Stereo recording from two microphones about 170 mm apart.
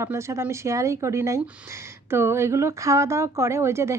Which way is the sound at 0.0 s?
15° right (ahead or behind).